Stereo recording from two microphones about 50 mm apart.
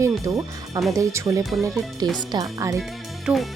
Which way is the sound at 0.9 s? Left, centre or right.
Right.